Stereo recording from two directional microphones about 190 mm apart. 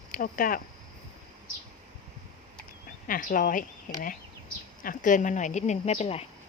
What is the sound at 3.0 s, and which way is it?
Speech, 45° left (ahead or behind).